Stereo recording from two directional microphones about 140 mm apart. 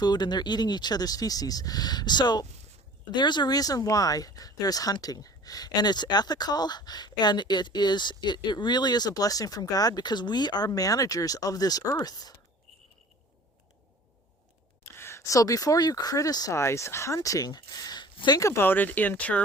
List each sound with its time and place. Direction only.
0.0 s speech: 30° left (ahead or behind)
14.9 s speech: 20° left (ahead or behind)